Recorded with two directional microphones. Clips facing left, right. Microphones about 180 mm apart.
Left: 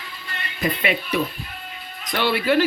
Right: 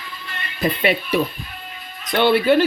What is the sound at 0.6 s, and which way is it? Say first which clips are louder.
Speech: right 4 dB; 35° right (ahead or behind).